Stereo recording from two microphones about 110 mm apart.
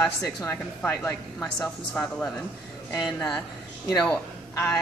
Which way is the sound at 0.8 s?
20° left (ahead or behind).